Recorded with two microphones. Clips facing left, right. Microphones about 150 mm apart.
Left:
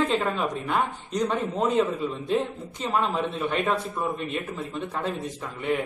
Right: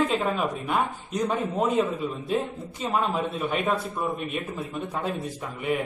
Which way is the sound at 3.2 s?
10° right (ahead or behind).